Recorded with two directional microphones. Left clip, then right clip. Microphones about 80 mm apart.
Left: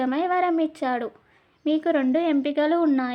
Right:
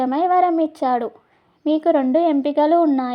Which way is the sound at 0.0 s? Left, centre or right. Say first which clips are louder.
Right 6 dB; right.